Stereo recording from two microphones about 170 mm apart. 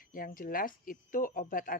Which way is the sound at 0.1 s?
55° left (ahead or behind).